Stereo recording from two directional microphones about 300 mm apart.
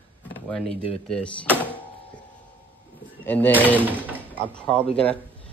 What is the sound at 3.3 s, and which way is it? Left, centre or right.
Speech, centre.